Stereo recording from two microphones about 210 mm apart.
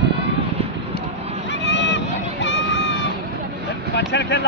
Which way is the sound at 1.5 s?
60° left (ahead or behind).